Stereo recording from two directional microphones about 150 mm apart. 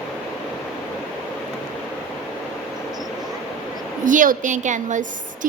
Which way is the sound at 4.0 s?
60° right (ahead or behind).